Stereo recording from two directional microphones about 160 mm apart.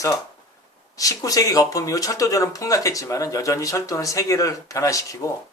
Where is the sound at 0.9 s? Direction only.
20° left (ahead or behind).